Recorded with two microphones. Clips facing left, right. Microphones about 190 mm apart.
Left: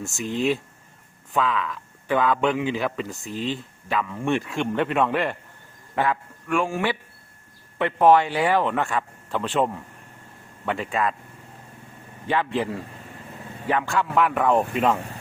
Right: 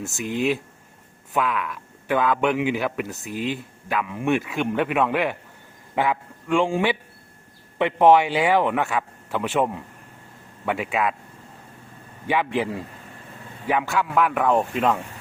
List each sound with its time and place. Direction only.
0.0 s speech: centre (ahead or behind)
1.3 s a man's voice: 10° right (ahead or behind)
12.3 s speech: 10° right (ahead or behind)
13.7 s speech: 10° right (ahead or behind)